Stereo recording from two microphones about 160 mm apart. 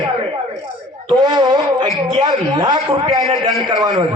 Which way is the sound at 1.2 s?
25° right (ahead or behind).